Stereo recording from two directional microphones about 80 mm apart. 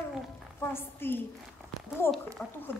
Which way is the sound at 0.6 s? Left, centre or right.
Left.